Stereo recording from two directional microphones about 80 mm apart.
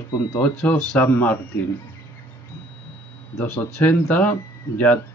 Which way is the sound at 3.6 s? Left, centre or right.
Centre.